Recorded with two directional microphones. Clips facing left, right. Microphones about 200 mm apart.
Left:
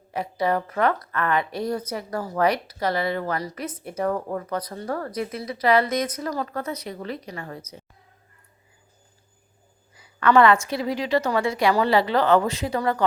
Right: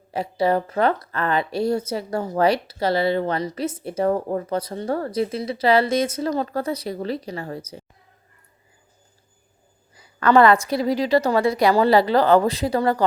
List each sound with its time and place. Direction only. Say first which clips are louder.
0.1 s a woman's voice: right 3 dB; 30° right (ahead or behind)
10.2 s a woman's voice: right 2 dB; 35° right (ahead or behind)